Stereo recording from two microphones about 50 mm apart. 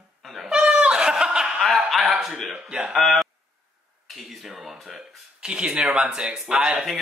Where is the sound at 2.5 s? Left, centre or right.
Centre.